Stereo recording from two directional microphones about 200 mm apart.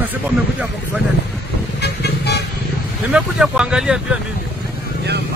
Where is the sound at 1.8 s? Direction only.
55° left (ahead or behind).